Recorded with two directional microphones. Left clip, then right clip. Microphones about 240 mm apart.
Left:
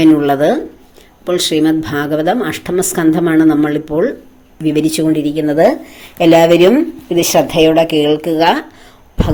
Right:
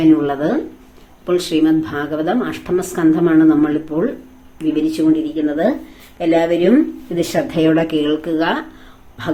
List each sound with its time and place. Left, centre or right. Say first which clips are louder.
0.0 s speech: left 5 dB; left